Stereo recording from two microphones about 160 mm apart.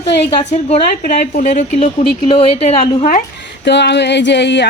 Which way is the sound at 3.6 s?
90° left.